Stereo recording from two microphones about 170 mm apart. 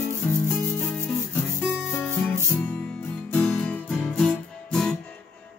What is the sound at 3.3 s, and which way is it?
Guitar, 10° left (ahead or behind).